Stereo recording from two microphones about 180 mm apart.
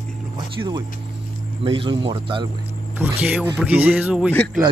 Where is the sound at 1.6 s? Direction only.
30° right (ahead or behind).